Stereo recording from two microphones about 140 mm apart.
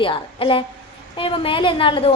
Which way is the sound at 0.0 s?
35° left (ahead or behind).